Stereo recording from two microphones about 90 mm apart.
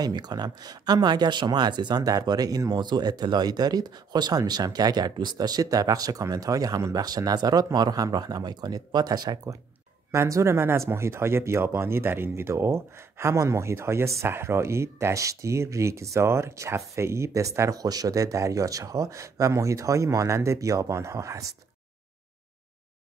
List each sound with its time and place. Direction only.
0.0 s speech: 50° right (ahead or behind)
10.1 s speech: 30° right (ahead or behind)